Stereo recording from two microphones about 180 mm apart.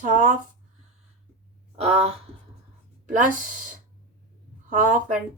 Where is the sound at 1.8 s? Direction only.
35° right (ahead or behind).